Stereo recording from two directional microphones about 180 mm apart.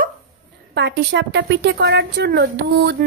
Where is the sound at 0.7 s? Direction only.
70° right (ahead or behind).